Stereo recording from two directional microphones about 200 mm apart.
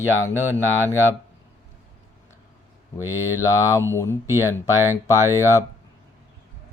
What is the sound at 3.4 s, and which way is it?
Speech, 15° left (ahead or behind).